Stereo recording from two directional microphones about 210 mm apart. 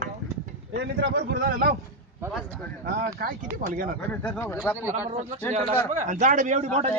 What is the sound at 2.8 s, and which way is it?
Speech, 45° right (ahead or behind).